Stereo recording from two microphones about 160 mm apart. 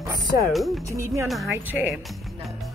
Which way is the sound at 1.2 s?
Centre (ahead or behind).